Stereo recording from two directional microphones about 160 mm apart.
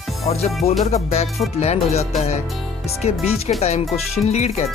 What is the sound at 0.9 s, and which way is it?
Speech, 40° left (ahead or behind).